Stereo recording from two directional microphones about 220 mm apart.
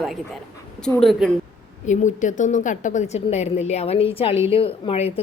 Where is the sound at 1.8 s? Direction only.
35° left (ahead or behind).